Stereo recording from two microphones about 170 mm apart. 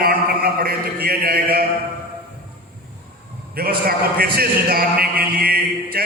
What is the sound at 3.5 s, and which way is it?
A man's voice, 65° right (ahead or behind).